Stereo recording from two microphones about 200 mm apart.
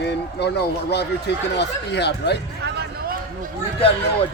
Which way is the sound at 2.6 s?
55° right (ahead or behind).